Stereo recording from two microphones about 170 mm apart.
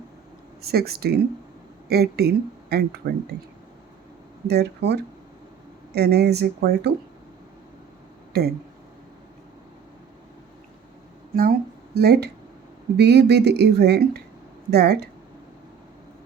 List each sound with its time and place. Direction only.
0.6 s speech: 65° right (ahead or behind)
4.4 s speech: 75° right (ahead or behind)
8.3 s speech: 65° right (ahead or behind)
11.9 s speech: 70° right (ahead or behind)